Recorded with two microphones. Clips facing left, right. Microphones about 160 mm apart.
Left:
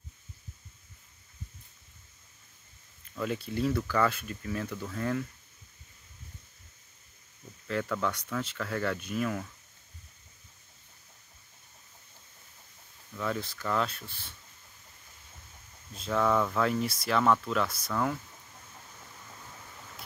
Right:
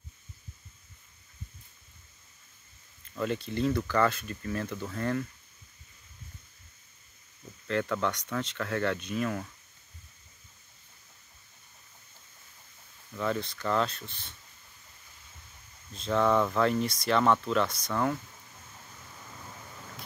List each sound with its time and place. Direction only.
3.2 s speech: 5° left (ahead or behind)
7.6 s speech: 5° left (ahead or behind)
13.2 s speech: centre (ahead or behind)
15.9 s speech: 5° left (ahead or behind)